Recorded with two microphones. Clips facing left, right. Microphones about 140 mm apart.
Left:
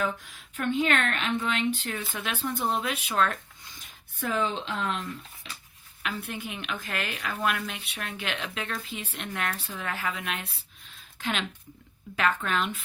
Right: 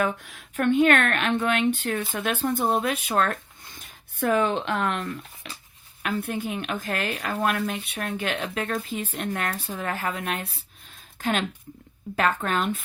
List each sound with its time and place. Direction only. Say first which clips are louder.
0.0 s speech: right 4 dB; 60° right (ahead or behind)
6.0 s speech: right 7 dB; 45° right (ahead or behind)